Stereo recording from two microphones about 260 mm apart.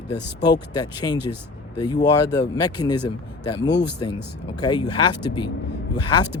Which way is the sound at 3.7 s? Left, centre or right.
Left.